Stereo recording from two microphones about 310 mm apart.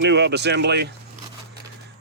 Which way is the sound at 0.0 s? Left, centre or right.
Right.